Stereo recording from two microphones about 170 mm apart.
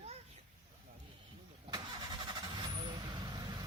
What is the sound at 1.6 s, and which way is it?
Vehicle, 25° right (ahead or behind).